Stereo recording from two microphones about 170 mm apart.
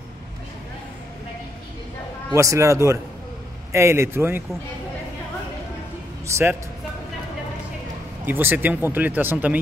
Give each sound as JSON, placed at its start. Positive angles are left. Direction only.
{"t": 2.3, "sound": "speech", "side_deg": -20}
{"t": 6.2, "sound": "speech", "side_deg": -15}
{"t": 8.3, "sound": "speech", "side_deg": -10}